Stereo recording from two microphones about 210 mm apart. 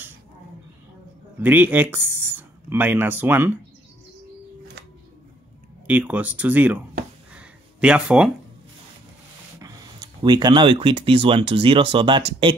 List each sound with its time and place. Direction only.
1.4 s speech: 10° right (ahead or behind)
5.9 s speech: 5° right (ahead or behind)
7.3 s a sound: 5° right (ahead or behind)
9.6 s speech: 20° right (ahead or behind)